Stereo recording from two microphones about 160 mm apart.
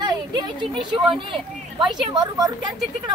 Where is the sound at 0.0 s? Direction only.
30° right (ahead or behind).